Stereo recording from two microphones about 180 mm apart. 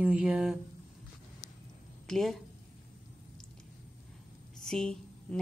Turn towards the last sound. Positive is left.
turn(degrees=5)  # may be behind; listen again after turning